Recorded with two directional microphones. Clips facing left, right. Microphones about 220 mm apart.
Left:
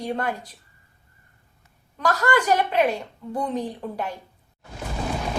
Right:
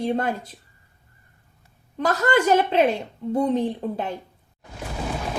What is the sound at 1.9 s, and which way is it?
A woman's voice, 25° right (ahead or behind).